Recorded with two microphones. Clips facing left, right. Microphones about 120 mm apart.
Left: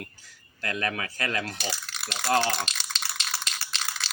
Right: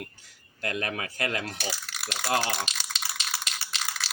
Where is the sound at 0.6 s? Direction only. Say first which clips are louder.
Left 1 dB; 20° right (ahead or behind).